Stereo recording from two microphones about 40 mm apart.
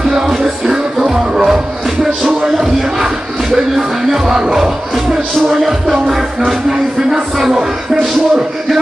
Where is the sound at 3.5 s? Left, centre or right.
Centre.